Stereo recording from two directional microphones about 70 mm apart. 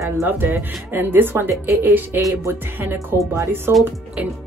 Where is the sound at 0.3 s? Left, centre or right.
Right.